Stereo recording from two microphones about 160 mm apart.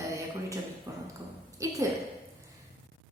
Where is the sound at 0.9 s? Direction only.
20° right (ahead or behind).